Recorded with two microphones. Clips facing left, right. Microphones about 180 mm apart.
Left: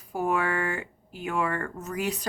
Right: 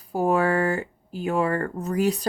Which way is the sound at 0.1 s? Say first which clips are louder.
Right 6 dB; 35° right (ahead or behind).